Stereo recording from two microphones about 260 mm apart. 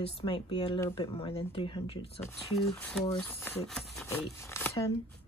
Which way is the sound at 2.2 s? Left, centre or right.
Centre.